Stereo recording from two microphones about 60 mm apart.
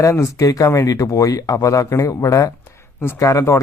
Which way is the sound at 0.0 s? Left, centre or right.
Left.